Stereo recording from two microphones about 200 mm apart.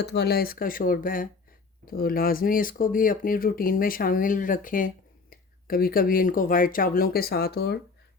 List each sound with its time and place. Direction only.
0.0 s speech: 55° left (ahead or behind)